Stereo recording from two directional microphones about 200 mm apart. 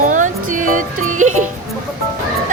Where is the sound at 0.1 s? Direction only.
40° right (ahead or behind).